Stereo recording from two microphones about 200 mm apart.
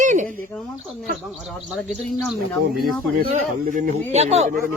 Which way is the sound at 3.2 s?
40° right (ahead or behind).